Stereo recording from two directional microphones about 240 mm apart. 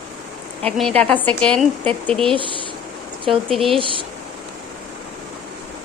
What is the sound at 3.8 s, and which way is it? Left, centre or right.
Speech, right.